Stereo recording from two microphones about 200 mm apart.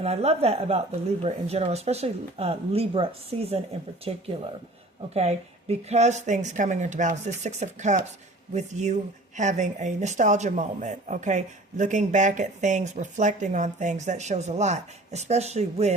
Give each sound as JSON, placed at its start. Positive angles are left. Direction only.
{"t": 0.0, "sound": "speech", "side_deg": -30}